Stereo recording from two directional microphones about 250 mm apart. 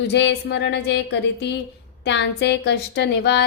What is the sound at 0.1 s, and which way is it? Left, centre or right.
Speech, left.